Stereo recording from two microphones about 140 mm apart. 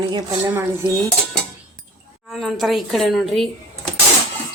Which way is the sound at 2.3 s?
Centre (ahead or behind).